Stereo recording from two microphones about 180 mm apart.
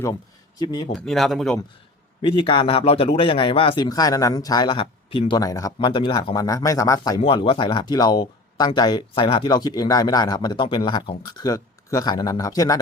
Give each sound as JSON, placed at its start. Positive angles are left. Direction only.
{"t": 0.6, "sound": "speech", "side_deg": 25}
{"t": 0.9, "sound": "speech", "side_deg": 0}
{"t": 2.2, "sound": "speech", "side_deg": 30}
{"t": 7.2, "sound": "speech", "side_deg": 30}